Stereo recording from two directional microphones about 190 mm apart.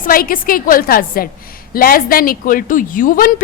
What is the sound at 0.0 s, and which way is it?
A woman's voice, 50° left (ahead or behind).